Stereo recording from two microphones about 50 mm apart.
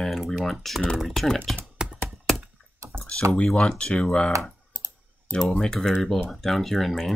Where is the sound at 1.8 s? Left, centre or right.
Centre.